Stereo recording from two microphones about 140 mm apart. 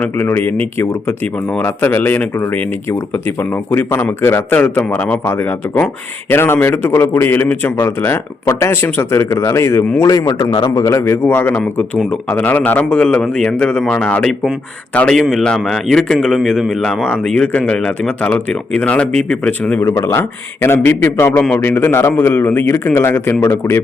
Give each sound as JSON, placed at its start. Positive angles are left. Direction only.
{"t": 0.0, "sound": "a man's voice", "side_deg": 15}
{"t": 19.8, "sound": "speech", "side_deg": 20}